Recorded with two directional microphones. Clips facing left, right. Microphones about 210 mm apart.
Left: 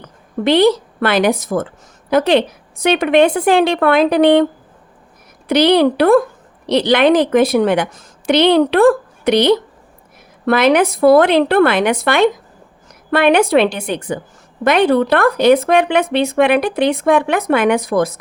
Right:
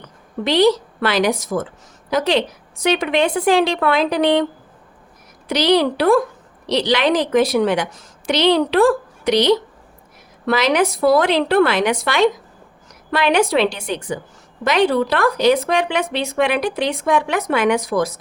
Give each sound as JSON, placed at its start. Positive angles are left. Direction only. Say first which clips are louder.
{"t": 0.4, "sound": "speech", "louder": "left 3 dB", "side_deg": 55}
{"t": 5.5, "sound": "speech", "louder": "left 4 dB", "side_deg": 55}